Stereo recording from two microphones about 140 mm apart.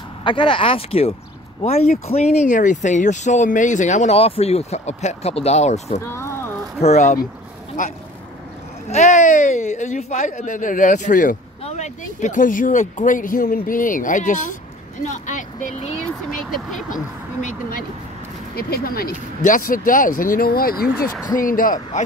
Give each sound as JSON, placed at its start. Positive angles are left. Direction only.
{"t": 0.2, "sound": "speech", "side_deg": 35}
{"t": 5.9, "sound": "a sound", "side_deg": 20}
{"t": 6.8, "sound": "speech", "side_deg": 55}
{"t": 8.8, "sound": "speech", "side_deg": 55}
{"t": 11.6, "sound": "speech", "side_deg": 55}
{"t": 16.3, "sound": "speech", "side_deg": 0}
{"t": 16.9, "sound": "speech", "side_deg": 70}
{"t": 18.6, "sound": "speech", "side_deg": 90}
{"t": 21.4, "sound": "speech", "side_deg": 75}
{"t": 21.9, "sound": "speech", "side_deg": 60}